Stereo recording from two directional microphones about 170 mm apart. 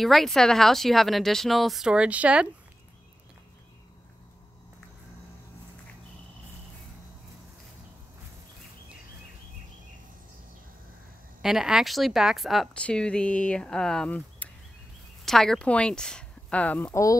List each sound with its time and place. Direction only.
0.0 s speech: centre (ahead or behind)
11.4 s speech: 5° right (ahead or behind)